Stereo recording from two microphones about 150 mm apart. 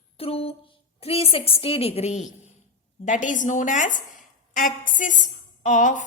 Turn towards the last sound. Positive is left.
turn(degrees=60)  # may be behind; listen again after turning